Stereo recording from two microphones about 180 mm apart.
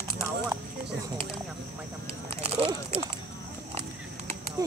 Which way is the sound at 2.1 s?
35° right (ahead or behind).